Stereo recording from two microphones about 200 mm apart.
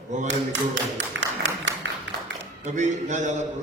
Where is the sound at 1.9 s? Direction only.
65° right (ahead or behind).